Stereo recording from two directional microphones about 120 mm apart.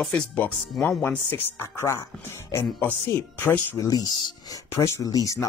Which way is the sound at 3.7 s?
30° left (ahead or behind).